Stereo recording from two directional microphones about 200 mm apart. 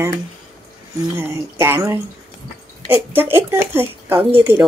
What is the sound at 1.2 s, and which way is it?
Speech, 15° right (ahead or behind).